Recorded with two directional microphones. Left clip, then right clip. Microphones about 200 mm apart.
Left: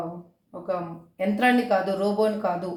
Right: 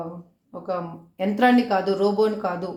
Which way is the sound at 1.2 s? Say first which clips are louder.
Right 3 dB; 45° right (ahead or behind).